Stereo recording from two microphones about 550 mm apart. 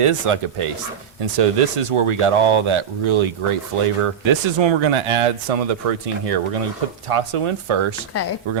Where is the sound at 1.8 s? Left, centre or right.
Right.